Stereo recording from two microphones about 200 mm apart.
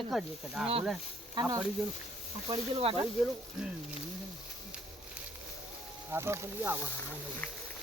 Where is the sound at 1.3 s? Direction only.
15° right (ahead or behind).